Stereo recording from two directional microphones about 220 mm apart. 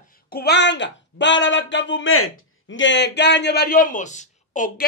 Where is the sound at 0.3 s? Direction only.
45° left (ahead or behind); by 2.3 s 70° left (ahead or behind).